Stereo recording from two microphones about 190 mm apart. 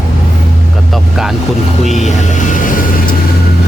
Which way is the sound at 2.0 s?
40° left (ahead or behind).